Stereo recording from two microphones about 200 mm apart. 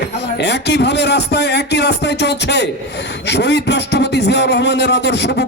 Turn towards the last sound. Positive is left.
turn(degrees=60)  # may be behind; listen again after turning